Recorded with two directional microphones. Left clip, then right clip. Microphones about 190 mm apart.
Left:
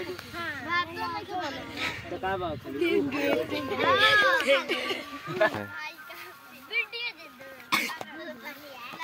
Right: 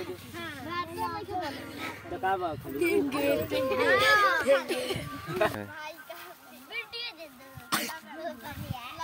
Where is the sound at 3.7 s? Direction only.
45° left (ahead or behind).